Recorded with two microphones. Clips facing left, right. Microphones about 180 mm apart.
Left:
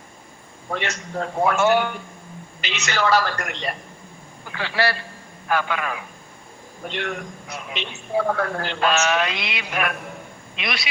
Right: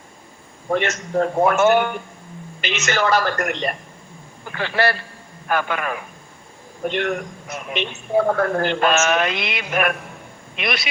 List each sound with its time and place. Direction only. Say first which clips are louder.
0.7 s a man's voice: right 7 dB; 50° right (ahead or behind)